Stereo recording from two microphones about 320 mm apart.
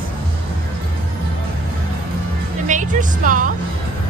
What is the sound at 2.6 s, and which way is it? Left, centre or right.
Speech, right.